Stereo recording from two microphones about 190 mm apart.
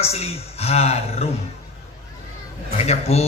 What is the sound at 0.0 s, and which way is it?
Mantra, 30° left (ahead or behind).